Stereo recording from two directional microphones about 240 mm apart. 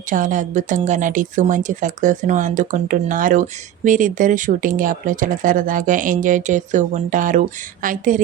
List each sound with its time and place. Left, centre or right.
0.1 s speech: right